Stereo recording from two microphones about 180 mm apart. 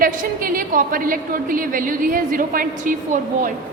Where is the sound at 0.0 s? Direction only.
50° right (ahead or behind).